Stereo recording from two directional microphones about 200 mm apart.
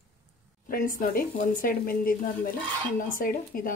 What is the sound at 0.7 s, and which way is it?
A woman's voice, 40° left (ahead or behind).